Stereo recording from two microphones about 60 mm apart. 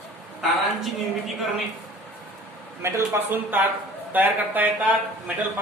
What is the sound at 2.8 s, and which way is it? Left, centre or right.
Speech, right.